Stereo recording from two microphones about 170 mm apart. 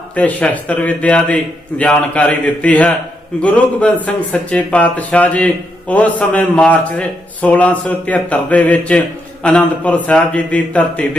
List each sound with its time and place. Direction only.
0.1 s a man's voice: 10° left (ahead or behind)